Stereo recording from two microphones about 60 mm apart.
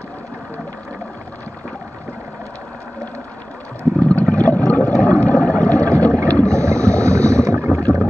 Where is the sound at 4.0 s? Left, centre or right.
Left.